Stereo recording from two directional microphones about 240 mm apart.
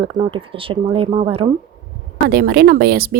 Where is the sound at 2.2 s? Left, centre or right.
Right.